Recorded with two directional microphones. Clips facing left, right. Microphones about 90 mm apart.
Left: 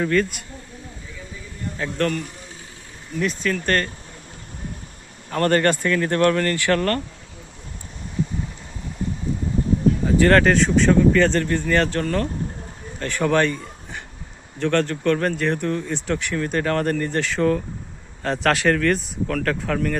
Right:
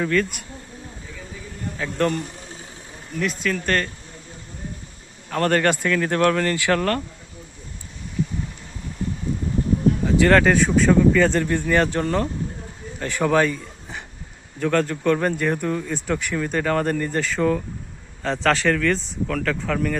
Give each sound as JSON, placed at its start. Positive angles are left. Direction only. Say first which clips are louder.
{"t": 0.0, "sound": "speech", "louder": "left 1 dB", "side_deg": 5}
{"t": 2.0, "sound": "speech", "louder": "right 1 dB", "side_deg": -25}
{"t": 3.2, "sound": "speech", "louder": "left 1 dB", "side_deg": 0}
{"t": 5.3, "sound": "speech", "louder": "left 1 dB", "side_deg": 0}
{"t": 10.2, "sound": "a man's voice", "louder": "even", "side_deg": 0}
{"t": 13.2, "sound": "a man's voice", "louder": "even", "side_deg": -5}